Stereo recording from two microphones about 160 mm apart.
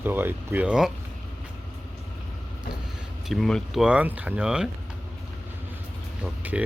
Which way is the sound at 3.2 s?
Centre (ahead or behind).